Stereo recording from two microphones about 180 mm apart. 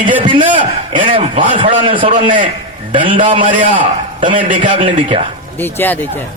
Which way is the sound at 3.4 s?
45° right (ahead or behind).